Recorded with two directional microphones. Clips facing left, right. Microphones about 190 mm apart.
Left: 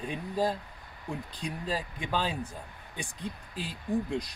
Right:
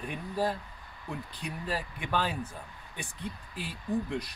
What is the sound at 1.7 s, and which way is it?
Speech, 15° left (ahead or behind).